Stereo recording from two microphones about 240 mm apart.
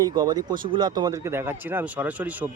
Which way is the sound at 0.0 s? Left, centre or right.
Centre.